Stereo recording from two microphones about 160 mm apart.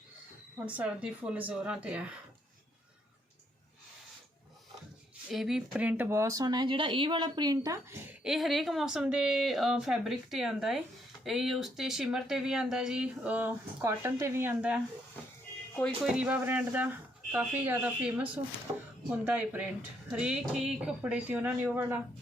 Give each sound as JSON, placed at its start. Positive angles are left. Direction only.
{"t": 0.7, "sound": "speech", "side_deg": -10}
{"t": 5.3, "sound": "speech", "side_deg": 0}
{"t": 8.2, "sound": "speech", "side_deg": 0}
{"t": 16.0, "sound": "speech", "side_deg": -10}
{"t": 18.7, "sound": "speech", "side_deg": -25}
{"t": 19.1, "sound": "speech", "side_deg": -10}